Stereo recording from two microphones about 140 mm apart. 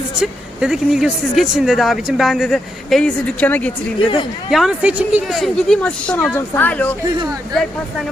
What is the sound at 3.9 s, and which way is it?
Speech, 35° left (ahead or behind).